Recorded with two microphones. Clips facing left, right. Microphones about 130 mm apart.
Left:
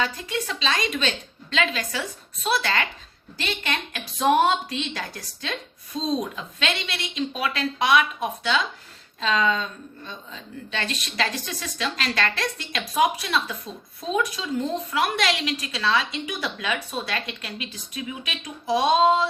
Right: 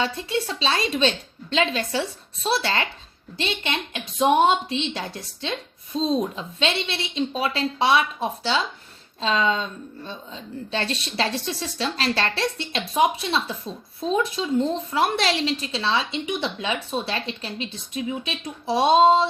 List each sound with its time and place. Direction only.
0.0 s a woman's voice: 30° right (ahead or behind)